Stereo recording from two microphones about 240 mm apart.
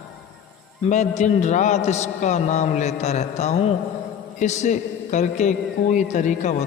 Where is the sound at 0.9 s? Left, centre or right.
Left.